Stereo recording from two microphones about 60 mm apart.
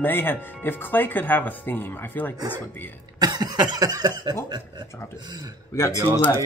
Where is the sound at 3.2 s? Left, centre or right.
Right.